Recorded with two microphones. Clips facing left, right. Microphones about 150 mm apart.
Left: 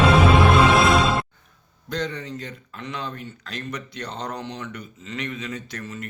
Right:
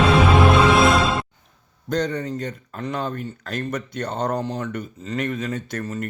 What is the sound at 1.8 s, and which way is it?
Speech, 45° right (ahead or behind).